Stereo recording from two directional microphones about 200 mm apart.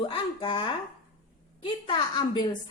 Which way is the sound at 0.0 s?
25° left (ahead or behind).